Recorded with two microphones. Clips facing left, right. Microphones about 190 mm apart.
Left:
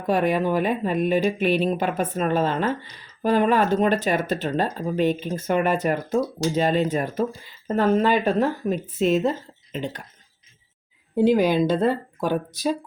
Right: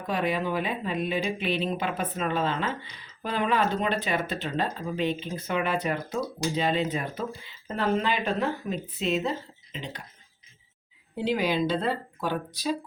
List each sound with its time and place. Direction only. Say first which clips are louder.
0.1 s speech: left 7 dB; 50° left (ahead or behind)
11.1 s speech: left 8 dB; 45° left (ahead or behind)